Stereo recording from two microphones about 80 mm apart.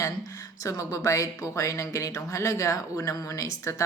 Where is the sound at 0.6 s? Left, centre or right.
Left.